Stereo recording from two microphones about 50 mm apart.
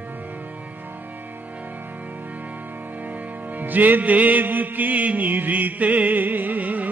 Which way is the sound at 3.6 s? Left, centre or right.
Right.